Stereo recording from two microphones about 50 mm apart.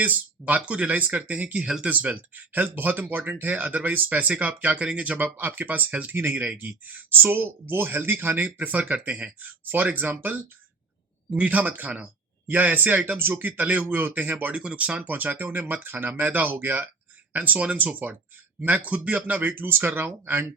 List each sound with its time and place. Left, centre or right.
0.0 s speech: right
1.6 s speech: centre
1.9 s speech: right
13.4 s speech: right
14.5 s speech: right
19.4 s speech: right